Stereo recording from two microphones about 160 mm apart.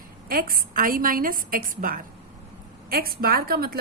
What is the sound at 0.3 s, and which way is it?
A woman's voice, 65° right (ahead or behind).